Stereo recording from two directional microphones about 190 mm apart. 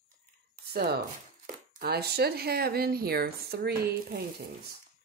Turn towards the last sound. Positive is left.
turn(degrees=-50)  # may be behind; listen again after turning